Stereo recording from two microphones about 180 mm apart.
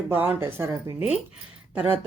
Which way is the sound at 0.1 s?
10° right (ahead or behind).